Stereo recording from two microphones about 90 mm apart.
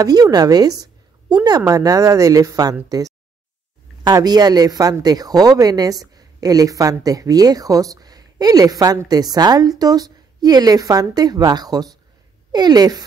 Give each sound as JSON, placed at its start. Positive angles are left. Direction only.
{"t": 0.0, "sound": "a woman's voice", "side_deg": -45}